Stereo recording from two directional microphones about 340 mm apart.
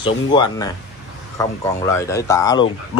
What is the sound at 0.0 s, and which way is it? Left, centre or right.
Speech, centre.